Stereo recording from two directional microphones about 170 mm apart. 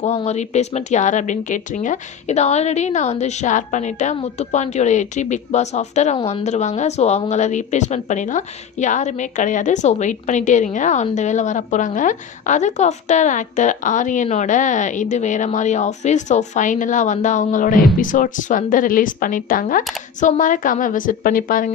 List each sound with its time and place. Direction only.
0.0 s a woman's voice: 40° left (ahead or behind)